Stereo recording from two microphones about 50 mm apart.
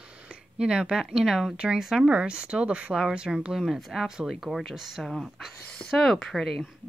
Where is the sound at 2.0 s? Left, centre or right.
Right.